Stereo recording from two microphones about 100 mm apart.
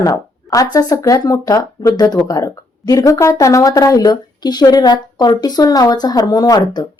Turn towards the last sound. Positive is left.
turn(degrees=40)  # may be behind; listen again after turning